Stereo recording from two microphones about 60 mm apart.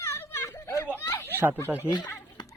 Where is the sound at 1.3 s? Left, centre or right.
Right.